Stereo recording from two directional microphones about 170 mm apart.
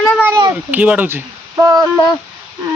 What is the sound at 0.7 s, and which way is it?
Speech, 10° right (ahead or behind).